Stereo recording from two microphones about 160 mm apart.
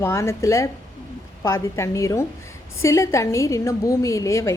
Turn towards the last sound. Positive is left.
turn(degrees=20)  # may be behind; listen again after turning